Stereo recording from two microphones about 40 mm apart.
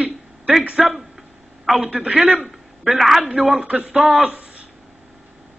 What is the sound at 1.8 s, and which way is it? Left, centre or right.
Speech, right.